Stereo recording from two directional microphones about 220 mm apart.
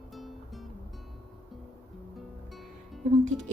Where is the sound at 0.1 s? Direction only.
Centre (ahead or behind).